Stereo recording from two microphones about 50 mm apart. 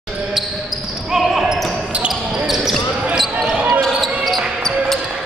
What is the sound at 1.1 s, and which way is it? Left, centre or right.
Basketball bounce, centre.